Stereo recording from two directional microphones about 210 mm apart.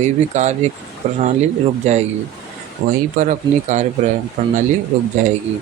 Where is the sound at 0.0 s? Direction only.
35° right (ahead or behind).